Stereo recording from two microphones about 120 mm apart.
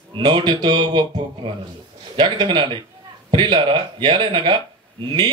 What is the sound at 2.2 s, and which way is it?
A man's voice, 40° right (ahead or behind).